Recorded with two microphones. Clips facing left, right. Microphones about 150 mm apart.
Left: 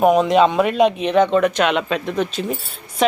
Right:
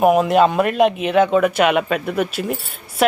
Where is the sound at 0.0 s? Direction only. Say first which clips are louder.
Even; 5° right (ahead or behind).